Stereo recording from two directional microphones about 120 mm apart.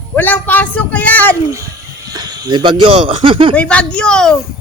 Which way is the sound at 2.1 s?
35° right (ahead or behind).